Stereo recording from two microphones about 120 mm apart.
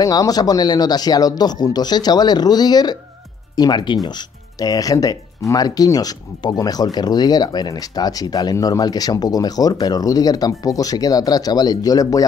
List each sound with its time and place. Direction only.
0.0 s speech: 30° left (ahead or behind)